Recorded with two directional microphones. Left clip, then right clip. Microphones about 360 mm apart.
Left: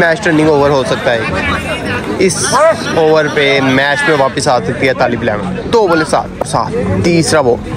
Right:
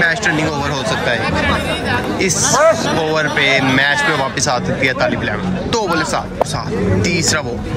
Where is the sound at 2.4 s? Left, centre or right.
Right.